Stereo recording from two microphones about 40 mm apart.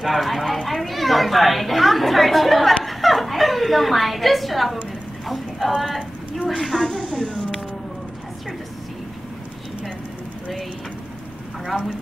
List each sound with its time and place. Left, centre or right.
0.0 s speech: centre
2.8 s a sound: centre
5.8 s clip-clop: centre
6.6 s speech: centre
7.0 s a sound: left
11.6 s speech: centre